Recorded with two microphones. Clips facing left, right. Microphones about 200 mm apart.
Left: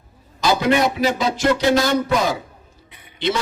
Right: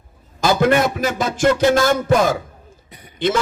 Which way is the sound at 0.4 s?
50° right (ahead or behind).